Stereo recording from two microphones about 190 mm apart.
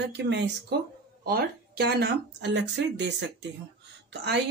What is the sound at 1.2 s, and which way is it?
Speech, 55° right (ahead or behind).